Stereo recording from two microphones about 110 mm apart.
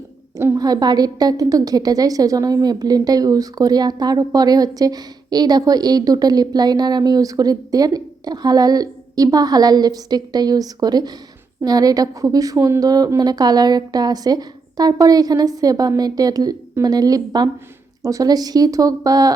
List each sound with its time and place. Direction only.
0.3 s a woman's voice: 25° right (ahead or behind)
0.6 s a woman's voice: 35° right (ahead or behind)